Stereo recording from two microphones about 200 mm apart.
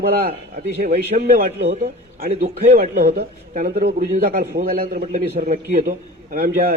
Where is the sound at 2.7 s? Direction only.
50° right (ahead or behind).